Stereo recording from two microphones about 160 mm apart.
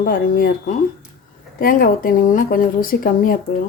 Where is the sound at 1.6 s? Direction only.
65° left (ahead or behind).